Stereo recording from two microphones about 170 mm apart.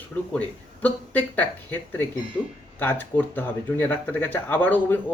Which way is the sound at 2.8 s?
10° left (ahead or behind).